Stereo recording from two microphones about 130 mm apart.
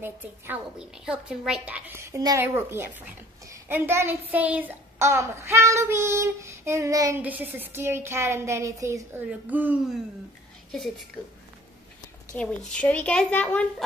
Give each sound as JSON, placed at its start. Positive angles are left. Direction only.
{"t": 0.0, "sound": "a woman's voice", "side_deg": -15}
{"t": 1.9, "sound": "a child's voice", "side_deg": -20}
{"t": 7.2, "sound": "a child's voice", "side_deg": -10}
{"t": 9.3, "sound": "a woman's voice", "side_deg": -15}
{"t": 12.3, "sound": "a woman's voice", "side_deg": 10}